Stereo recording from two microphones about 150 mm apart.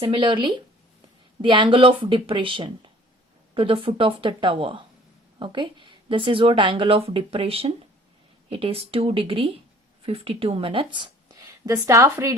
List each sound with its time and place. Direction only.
0.0 s a woman's voice: 35° right (ahead or behind)